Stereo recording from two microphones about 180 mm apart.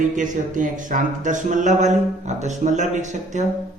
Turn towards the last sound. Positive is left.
turn(degrees=-40)  # may be behind; listen again after turning